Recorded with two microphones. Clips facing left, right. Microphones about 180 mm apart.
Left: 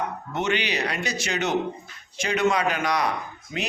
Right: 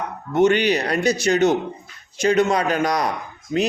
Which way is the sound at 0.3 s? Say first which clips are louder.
Right 9 dB; 45° right (ahead or behind).